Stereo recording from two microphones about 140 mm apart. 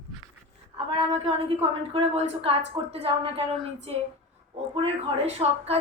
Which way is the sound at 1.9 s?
45° right (ahead or behind).